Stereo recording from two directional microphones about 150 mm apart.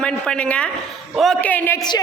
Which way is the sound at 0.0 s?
5° left (ahead or behind).